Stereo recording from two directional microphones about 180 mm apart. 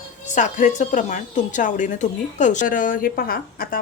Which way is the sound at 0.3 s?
45° left (ahead or behind).